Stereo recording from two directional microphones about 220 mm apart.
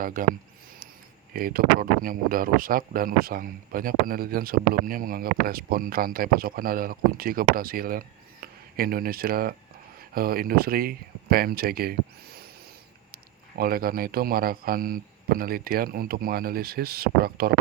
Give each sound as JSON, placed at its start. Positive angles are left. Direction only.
{"t": 0.0, "sound": "speech", "side_deg": -40}
{"t": 1.3, "sound": "a man's voice", "side_deg": -40}
{"t": 13.6, "sound": "a man's voice", "side_deg": -45}